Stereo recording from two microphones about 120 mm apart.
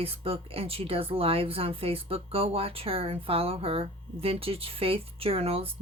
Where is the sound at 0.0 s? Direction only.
55° right (ahead or behind).